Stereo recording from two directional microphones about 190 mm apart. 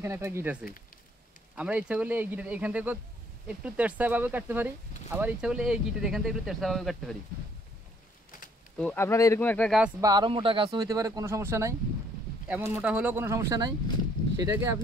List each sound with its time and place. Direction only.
0.0 s speech: 15° right (ahead or behind)
8.7 s speech: 10° left (ahead or behind)
9.9 s speech: 20° right (ahead or behind)